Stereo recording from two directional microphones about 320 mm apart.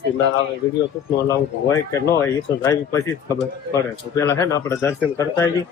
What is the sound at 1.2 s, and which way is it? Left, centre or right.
Speech, centre.